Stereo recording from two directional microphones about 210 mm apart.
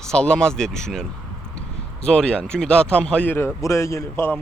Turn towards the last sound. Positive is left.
turn(degrees=10)  # may be behind; listen again after turning